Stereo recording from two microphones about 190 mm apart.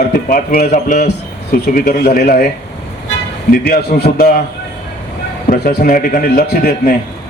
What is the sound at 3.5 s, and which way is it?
Speech, 55° left (ahead or behind).